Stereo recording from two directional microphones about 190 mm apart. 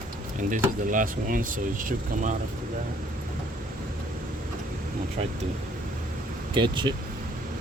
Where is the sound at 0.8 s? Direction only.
45° right (ahead or behind).